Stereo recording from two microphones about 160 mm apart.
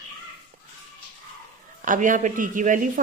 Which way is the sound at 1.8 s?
55° right (ahead or behind).